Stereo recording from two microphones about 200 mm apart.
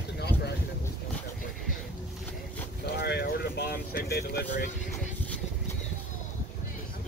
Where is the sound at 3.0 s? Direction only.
55° left (ahead or behind).